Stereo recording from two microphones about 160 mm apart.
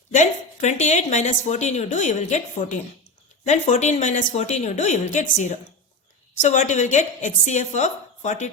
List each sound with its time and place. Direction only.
0.1 s a woman's voice: 50° left (ahead or behind)